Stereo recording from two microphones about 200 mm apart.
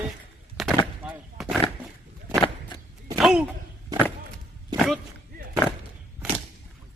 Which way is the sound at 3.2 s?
5° right (ahead or behind).